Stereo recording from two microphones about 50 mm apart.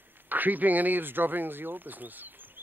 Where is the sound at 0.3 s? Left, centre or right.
Right.